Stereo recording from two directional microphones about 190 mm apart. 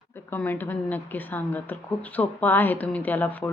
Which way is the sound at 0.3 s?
10° left (ahead or behind).